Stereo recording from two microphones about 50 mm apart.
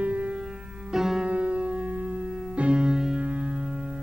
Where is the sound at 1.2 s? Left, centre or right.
Right.